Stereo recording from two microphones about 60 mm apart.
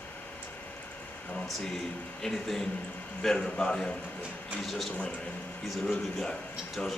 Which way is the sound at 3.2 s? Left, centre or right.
Centre.